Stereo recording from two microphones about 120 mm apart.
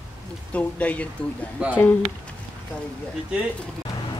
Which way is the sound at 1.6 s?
10° right (ahead or behind).